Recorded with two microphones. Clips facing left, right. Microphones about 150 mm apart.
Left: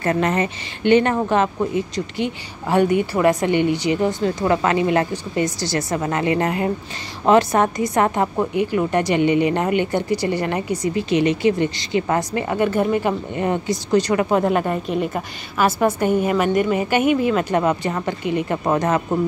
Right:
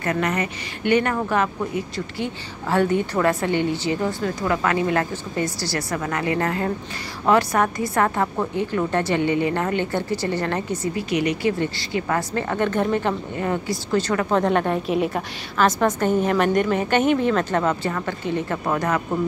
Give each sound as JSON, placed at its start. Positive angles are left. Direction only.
{"t": 0.0, "sound": "a woman's voice", "side_deg": 30}
{"t": 11.1, "sound": "a woman's voice", "side_deg": 25}
{"t": 13.4, "sound": "a woman's voice", "side_deg": 20}